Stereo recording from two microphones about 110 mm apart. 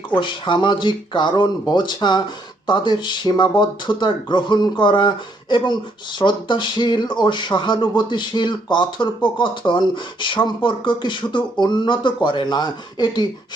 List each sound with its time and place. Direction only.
0.2 s speech: 45° left (ahead or behind)